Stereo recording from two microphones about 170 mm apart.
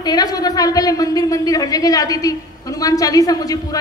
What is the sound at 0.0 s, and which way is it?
A man's voice, 25° left (ahead or behind).